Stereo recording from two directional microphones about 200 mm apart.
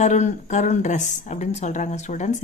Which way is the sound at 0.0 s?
35° left (ahead or behind).